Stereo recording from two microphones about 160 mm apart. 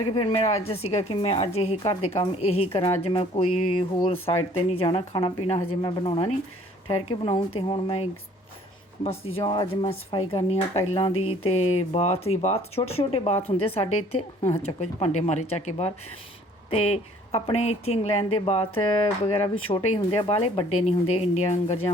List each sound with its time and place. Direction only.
0.1 s speech: 35° left (ahead or behind)
9.4 s speech: 25° left (ahead or behind)
10.1 s speech: 40° left (ahead or behind)